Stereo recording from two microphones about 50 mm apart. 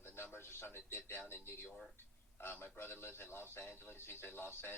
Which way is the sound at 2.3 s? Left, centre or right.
Left.